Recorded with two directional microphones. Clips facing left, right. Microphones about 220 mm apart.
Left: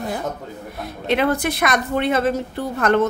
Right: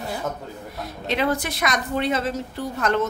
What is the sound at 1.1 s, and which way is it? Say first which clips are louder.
A woman's voice: left 4 dB; 55° left (ahead or behind).